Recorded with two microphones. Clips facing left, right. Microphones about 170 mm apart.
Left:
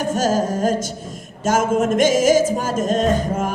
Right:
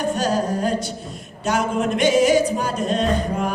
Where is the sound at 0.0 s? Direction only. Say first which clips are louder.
Left 2 dB; 45° left (ahead or behind).